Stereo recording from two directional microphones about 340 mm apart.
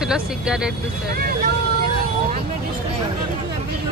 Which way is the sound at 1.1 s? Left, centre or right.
Right.